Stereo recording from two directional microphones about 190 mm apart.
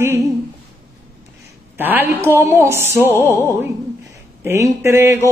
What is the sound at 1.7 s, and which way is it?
A woman's voice, 10° right (ahead or behind).